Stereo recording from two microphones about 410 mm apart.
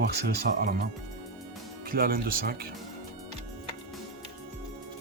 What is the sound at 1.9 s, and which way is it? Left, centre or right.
Speech, right.